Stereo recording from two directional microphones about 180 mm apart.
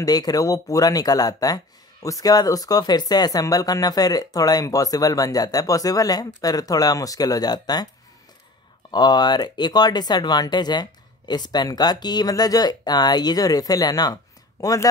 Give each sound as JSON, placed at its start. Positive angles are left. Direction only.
{"t": 0.0, "sound": "speech", "side_deg": 20}
{"t": 8.9, "sound": "speech", "side_deg": 20}